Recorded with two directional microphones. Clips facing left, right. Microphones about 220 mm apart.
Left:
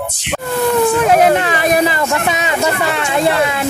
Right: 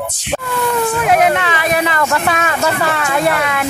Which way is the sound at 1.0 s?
30° left (ahead or behind).